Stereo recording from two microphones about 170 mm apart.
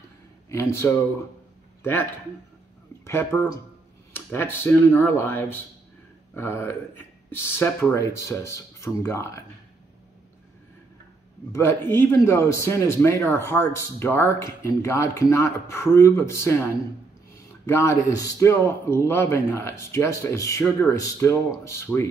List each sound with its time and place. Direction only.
0.5 s a man's voice: 15° left (ahead or behind)
3.1 s speech: 15° left (ahead or behind)
11.5 s speech: 15° left (ahead or behind)
17.6 s speech: 15° left (ahead or behind)